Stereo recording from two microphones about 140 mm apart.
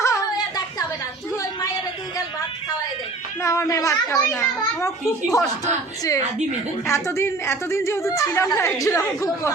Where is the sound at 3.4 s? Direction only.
20° left (ahead or behind).